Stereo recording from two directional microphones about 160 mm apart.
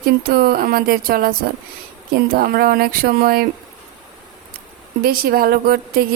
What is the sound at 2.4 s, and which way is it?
Speech, 70° right (ahead or behind).